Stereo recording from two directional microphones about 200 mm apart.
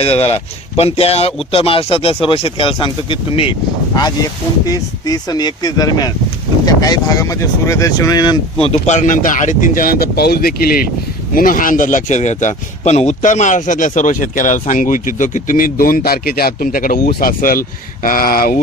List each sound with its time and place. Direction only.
0.0 s speech: 30° left (ahead or behind); by 18.6 s 45° left (ahead or behind)